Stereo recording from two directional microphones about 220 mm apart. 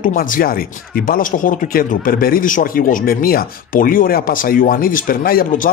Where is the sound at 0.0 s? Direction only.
40° left (ahead or behind).